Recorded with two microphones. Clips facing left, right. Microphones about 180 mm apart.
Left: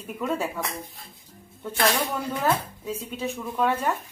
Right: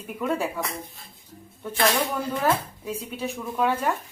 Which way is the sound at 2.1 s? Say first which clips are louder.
Right 1 dB; centre (ahead or behind).